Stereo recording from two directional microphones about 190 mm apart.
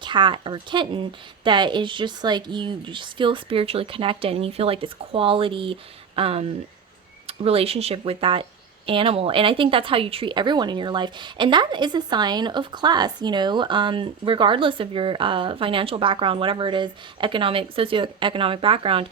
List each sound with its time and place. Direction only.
0.0 s speech: 25° right (ahead or behind)